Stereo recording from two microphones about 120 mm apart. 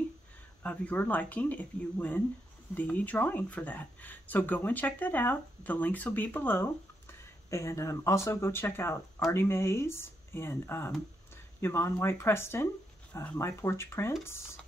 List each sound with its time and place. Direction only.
0.6 s speech: 10° left (ahead or behind)